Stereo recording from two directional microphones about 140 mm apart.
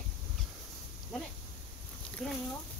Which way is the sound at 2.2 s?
5° left (ahead or behind).